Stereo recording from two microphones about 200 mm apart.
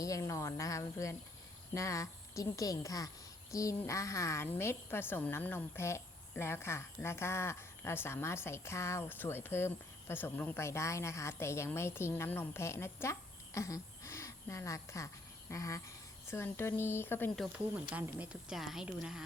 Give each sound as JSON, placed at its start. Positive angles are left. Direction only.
{"t": 0.0, "sound": "a woman's voice", "side_deg": 15}